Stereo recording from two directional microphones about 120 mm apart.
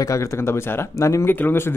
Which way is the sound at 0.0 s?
25° left (ahead or behind).